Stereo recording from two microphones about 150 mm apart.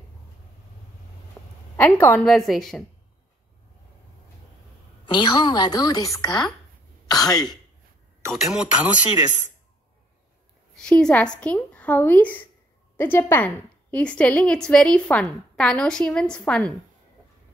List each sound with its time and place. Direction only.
1.4 s a sound: 15° left (ahead or behind)
1.8 s a woman's voice: 15° left (ahead or behind)
2.2 s speech: centre (ahead or behind)
5.0 s a woman's voice: 30° left (ahead or behind)
8.3 s speech: centre (ahead or behind)
10.8 s a woman's voice: 5° left (ahead or behind)